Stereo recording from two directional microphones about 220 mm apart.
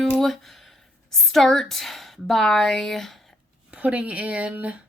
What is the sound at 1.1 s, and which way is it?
Speech, centre (ahead or behind).